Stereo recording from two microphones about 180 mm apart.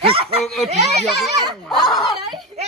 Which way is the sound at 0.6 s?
35° right (ahead or behind).